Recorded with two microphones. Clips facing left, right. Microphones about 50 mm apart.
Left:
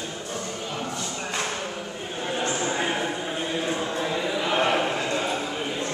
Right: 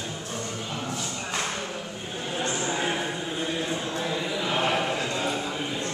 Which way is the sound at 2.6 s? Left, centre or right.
Centre.